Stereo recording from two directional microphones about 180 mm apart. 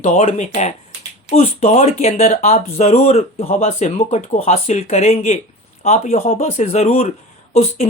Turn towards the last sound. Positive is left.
turn(degrees=35)  # may be behind; listen again after turning